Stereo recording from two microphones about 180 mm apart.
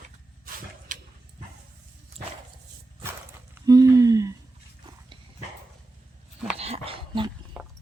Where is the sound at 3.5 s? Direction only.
20° right (ahead or behind).